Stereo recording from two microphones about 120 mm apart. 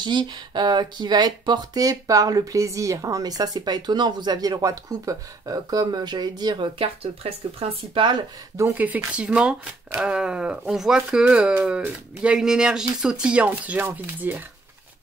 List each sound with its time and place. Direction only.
0.0 s speech: 40° right (ahead or behind)
8.7 s speech: 15° right (ahead or behind)